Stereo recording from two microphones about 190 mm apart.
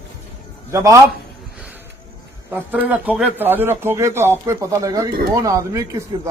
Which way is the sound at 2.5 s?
10° right (ahead or behind).